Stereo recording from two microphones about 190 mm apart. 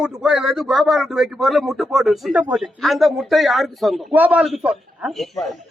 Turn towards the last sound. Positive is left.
turn(degrees=0)  # may be behind; listen again after turning